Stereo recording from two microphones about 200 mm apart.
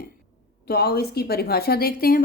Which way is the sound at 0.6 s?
50° left (ahead or behind).